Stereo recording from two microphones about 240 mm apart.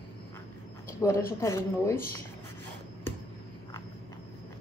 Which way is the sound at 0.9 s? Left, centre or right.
Centre.